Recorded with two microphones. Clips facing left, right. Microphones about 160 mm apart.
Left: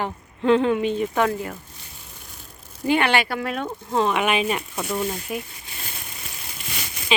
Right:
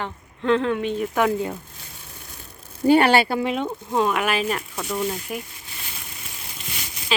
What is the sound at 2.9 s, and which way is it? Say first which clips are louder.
Speech: right 4 dB; 35° right (ahead or behind).